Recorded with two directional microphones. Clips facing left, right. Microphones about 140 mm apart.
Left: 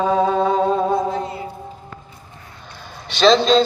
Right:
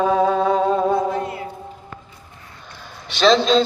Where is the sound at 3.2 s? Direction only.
5° right (ahead or behind).